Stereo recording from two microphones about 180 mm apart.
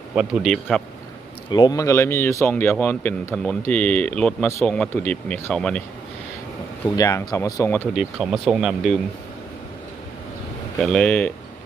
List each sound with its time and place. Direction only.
0.2 s speech: centre (ahead or behind)
1.5 s speech: 25° left (ahead or behind); by 5.8 s 5° left (ahead or behind)
6.9 s speech: 20° left (ahead or behind)
7.9 s speech: centre (ahead or behind)
10.8 s speech: 5° left (ahead or behind)